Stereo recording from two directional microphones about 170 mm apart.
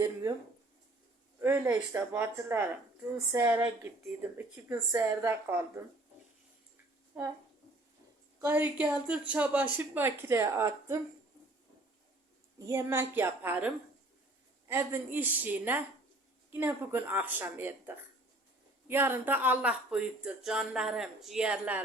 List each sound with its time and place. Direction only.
0.0 s speech: 20° right (ahead or behind)
1.4 s speech: 15° right (ahead or behind)
8.4 s speech: 15° right (ahead or behind)
12.5 s speech: 15° right (ahead or behind)